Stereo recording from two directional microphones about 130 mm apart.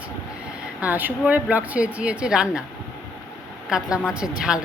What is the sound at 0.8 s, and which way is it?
A woman's voice, 15° right (ahead or behind).